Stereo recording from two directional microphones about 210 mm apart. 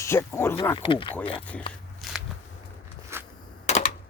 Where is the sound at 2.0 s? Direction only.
Centre (ahead or behind).